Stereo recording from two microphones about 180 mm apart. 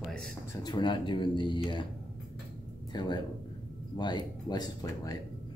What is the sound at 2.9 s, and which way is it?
Speech, 25° left (ahead or behind).